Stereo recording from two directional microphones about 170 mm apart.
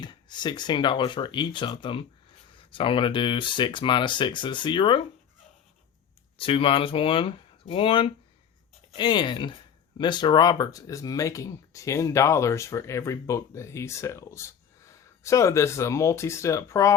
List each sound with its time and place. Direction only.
0.0 s speech: 25° left (ahead or behind)
6.3 s speech: 30° left (ahead or behind)